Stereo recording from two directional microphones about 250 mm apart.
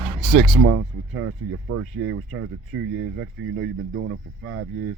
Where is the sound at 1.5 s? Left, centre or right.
Right.